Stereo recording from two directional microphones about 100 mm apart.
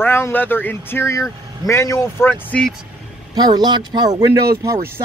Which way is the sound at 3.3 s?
45° right (ahead or behind).